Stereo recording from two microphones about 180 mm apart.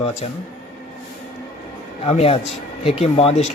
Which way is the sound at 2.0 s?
35° left (ahead or behind).